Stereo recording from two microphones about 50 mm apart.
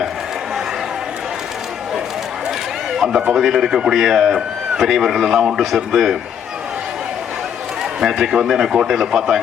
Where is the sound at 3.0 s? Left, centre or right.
Centre.